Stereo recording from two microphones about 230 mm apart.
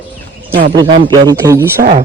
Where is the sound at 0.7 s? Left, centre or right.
Centre.